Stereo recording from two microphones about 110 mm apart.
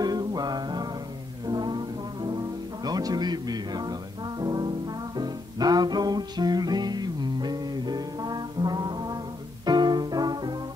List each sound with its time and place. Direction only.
0.0 s music: 35° right (ahead or behind)